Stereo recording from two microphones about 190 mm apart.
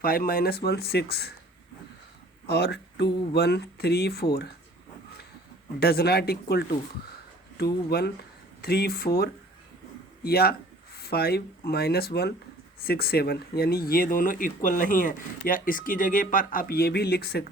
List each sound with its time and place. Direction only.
0.0 s speech: 50° left (ahead or behind)
2.5 s speech: 60° left (ahead or behind)
5.8 s speech: 55° left (ahead or behind)